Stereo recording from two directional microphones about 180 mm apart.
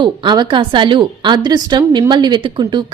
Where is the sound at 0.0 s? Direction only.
25° right (ahead or behind).